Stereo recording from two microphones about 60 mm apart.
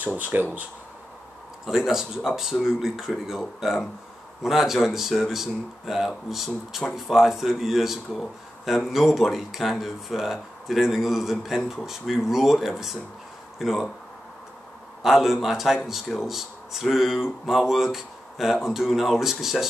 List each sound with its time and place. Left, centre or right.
0.0 s speech: right
1.7 s speech: centre
15.0 s speech: centre